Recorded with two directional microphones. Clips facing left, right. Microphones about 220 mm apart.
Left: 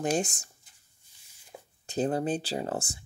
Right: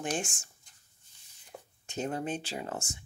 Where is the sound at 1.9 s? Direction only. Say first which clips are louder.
Left 6 dB; 35° left (ahead or behind).